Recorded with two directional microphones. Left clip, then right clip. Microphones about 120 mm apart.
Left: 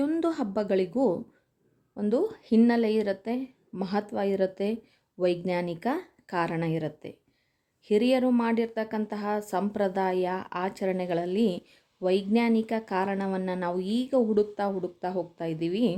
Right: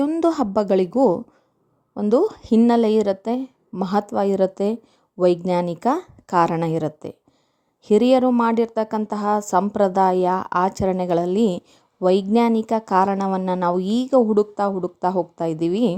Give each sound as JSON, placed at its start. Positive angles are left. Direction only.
{"t": 0.0, "sound": "a woman's voice", "side_deg": -50}